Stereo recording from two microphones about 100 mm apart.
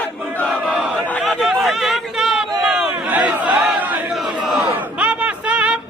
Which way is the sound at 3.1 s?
15° right (ahead or behind).